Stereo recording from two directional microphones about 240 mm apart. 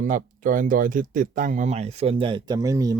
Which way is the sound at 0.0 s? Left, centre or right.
Right.